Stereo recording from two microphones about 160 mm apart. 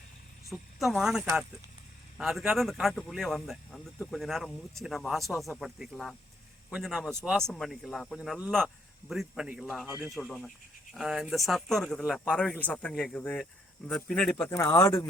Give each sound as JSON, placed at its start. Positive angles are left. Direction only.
{"t": 0.5, "sound": "speech", "side_deg": 0}
{"t": 7.1, "sound": "speech", "side_deg": -15}
{"t": 7.3, "sound": "speech", "side_deg": 5}
{"t": 14.5, "sound": "speech", "side_deg": 15}